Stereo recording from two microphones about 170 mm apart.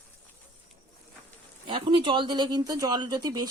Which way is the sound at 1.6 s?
25° right (ahead or behind).